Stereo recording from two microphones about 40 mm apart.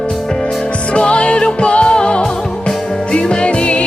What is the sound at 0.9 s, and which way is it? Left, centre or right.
Music, left.